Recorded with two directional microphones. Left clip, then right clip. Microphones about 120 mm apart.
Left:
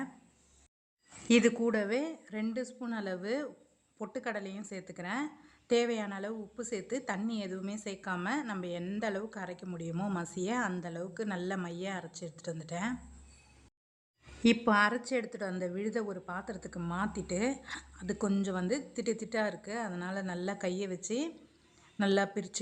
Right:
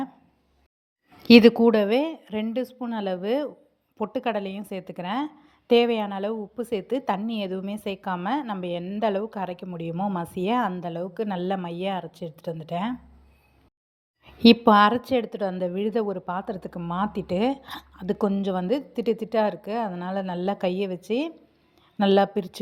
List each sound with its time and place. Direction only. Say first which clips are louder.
1.2 s a woman's voice: right 13 dB; 55° right (ahead or behind)
9.9 s speech: right 10 dB; 15° right (ahead or behind)
10.2 s a woman's voice: right 9 dB; 40° right (ahead or behind)
14.4 s a woman's voice: right 11 dB; 45° right (ahead or behind)